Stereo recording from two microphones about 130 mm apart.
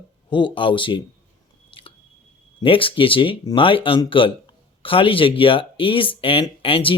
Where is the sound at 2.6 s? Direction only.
40° left (ahead or behind).